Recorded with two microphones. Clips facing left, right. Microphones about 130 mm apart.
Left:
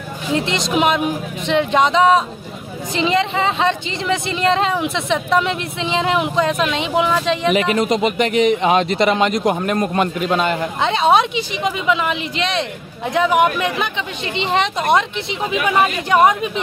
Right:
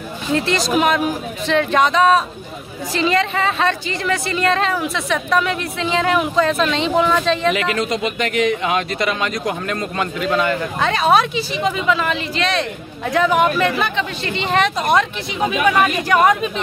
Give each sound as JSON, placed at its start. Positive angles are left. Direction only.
{"t": 0.3, "sound": "speech", "side_deg": 20}